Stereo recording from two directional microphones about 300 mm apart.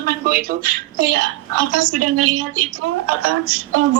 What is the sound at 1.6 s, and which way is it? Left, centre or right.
A woman's voice, right.